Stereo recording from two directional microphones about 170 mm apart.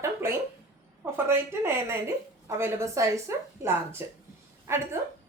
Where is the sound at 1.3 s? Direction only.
15° right (ahead or behind).